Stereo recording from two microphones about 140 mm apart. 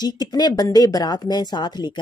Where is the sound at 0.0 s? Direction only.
30° left (ahead or behind).